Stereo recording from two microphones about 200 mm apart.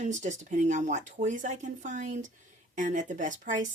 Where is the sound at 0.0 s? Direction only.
35° right (ahead or behind).